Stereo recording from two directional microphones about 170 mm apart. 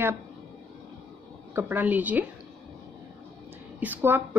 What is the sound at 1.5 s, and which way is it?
Speech, 10° right (ahead or behind).